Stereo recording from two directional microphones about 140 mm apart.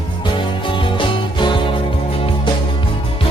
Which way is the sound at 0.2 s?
35° left (ahead or behind).